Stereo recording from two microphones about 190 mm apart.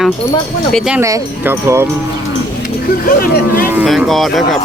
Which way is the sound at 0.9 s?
15° right (ahead or behind).